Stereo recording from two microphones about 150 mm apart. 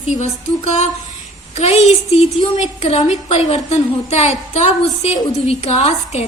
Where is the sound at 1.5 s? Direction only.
45° left (ahead or behind).